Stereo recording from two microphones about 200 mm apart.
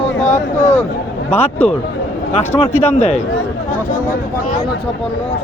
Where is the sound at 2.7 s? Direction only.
35° left (ahead or behind).